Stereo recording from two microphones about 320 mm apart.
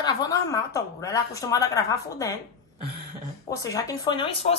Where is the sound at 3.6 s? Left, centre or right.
Centre.